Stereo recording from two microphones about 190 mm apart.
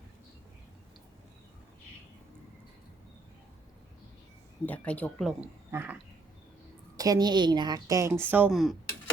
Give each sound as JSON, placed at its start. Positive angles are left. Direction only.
{"t": 4.6, "sound": "speech", "side_deg": 10}
{"t": 5.7, "sound": "a sound", "side_deg": -10}
{"t": 6.9, "sound": "a woman's voice", "side_deg": -20}